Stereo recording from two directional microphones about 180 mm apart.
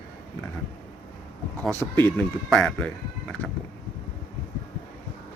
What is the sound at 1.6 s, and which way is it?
Speech, 10° left (ahead or behind).